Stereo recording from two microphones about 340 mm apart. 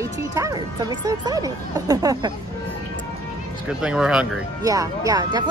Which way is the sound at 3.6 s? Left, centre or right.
Centre.